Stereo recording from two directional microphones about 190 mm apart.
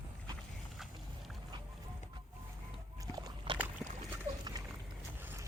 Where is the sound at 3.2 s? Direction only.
25° right (ahead or behind).